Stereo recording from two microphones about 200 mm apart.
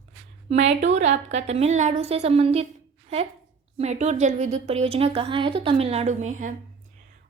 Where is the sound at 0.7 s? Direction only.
35° right (ahead or behind).